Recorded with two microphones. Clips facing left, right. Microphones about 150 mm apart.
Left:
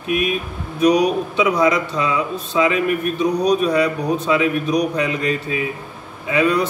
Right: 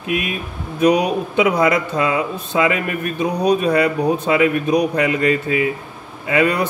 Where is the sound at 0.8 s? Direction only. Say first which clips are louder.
Even; 55° right (ahead or behind).